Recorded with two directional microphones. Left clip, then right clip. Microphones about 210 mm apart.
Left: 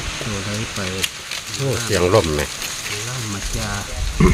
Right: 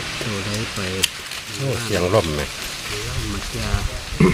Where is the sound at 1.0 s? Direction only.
50° right (ahead or behind).